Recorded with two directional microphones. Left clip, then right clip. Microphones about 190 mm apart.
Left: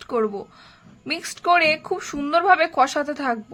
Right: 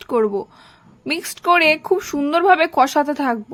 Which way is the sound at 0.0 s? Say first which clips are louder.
Right 5 dB; 20° right (ahead or behind).